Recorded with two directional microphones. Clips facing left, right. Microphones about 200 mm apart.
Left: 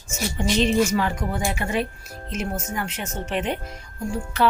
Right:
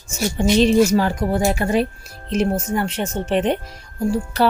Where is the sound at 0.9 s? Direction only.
35° right (ahead or behind).